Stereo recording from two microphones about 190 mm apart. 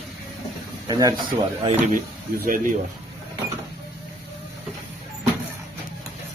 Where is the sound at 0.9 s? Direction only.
20° right (ahead or behind).